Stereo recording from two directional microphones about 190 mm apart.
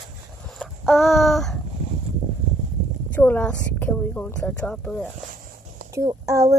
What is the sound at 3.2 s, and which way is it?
A woman's voice, 10° left (ahead or behind).